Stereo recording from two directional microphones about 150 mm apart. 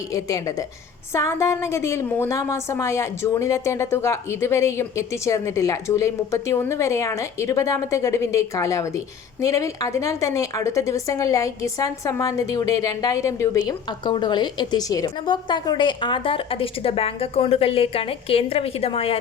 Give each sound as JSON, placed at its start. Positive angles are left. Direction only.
{"t": 0.1, "sound": "a woman's voice", "side_deg": 20}